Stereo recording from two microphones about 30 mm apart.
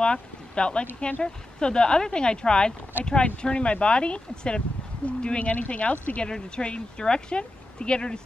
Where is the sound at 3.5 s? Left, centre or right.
Left.